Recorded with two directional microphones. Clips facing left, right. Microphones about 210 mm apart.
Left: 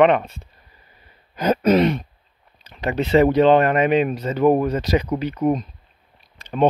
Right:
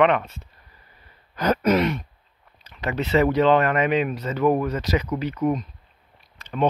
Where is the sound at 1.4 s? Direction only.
25° left (ahead or behind).